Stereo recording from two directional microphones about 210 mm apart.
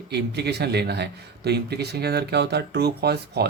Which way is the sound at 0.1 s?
50° right (ahead or behind).